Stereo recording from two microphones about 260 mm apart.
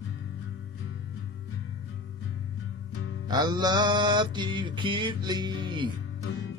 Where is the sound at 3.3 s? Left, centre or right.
Centre.